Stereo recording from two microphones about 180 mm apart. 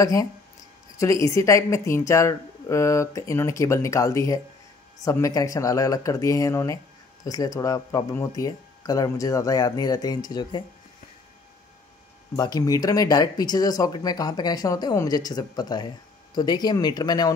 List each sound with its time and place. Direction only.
0.0 s speech: 20° left (ahead or behind)
12.4 s speech: 20° left (ahead or behind)